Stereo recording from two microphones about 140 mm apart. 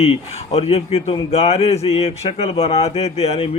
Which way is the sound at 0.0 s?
45° left (ahead or behind).